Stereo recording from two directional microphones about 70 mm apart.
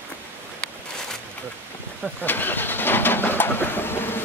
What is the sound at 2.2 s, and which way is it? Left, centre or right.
Vehicle, left.